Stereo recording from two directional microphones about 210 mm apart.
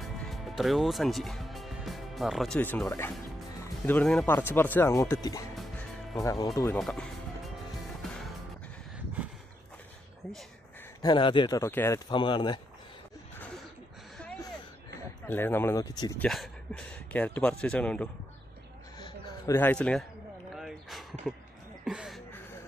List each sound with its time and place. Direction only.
0.0 s speech: centre (ahead or behind); by 6.8 s 15° left (ahead or behind)
6.8 s speech: centre (ahead or behind)
8.9 s a sound: 5° right (ahead or behind)
11.0 s speech: 20° left (ahead or behind)
12.1 s speech: 25° left (ahead or behind)
15.2 s speech: 10° left (ahead or behind)
16.2 s a man's voice: 5° left (ahead or behind)
18.9 s a sound: 20° left (ahead or behind); by 22.2 s centre (ahead or behind)